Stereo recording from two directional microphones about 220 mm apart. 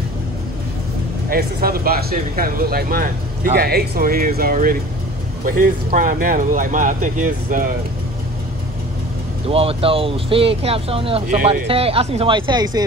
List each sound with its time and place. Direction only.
1.3 s speech: 40° right (ahead or behind)
9.5 s speech: 25° right (ahead or behind)